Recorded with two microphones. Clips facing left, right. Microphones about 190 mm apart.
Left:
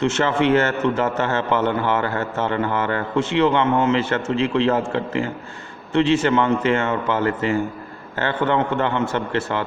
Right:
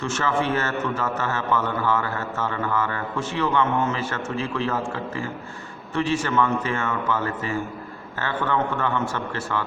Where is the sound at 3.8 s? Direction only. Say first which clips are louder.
Left 6 dB; 80° left.